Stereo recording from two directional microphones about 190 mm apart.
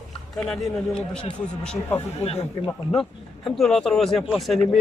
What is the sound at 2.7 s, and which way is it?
A man's voice, 5° left (ahead or behind).